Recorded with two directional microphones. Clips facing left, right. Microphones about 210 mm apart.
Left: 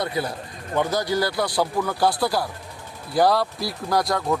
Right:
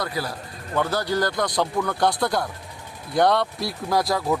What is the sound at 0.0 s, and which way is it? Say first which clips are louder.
Speech: left 2 dB; 25° left (ahead or behind).